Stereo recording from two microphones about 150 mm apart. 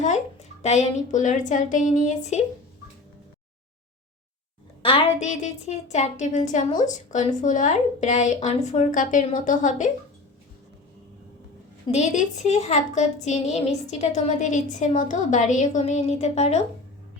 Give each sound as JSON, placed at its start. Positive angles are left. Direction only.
{"t": 0.0, "sound": "a woman's voice", "side_deg": 50}
{"t": 4.8, "sound": "a woman's voice", "side_deg": 40}
{"t": 11.9, "sound": "a woman's voice", "side_deg": 50}